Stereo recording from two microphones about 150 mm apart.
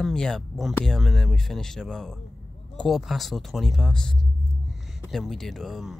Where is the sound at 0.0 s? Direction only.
5° left (ahead or behind).